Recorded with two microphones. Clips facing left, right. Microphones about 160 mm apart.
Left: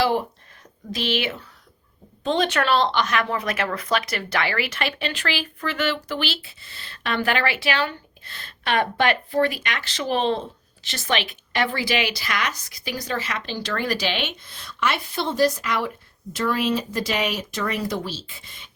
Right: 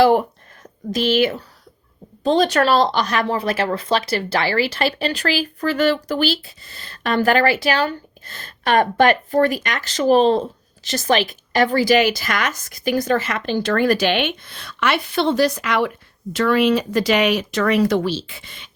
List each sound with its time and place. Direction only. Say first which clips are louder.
0.9 s a woman's voice: right 8 dB; 45° right (ahead or behind); by 18.7 s 75° right (ahead or behind)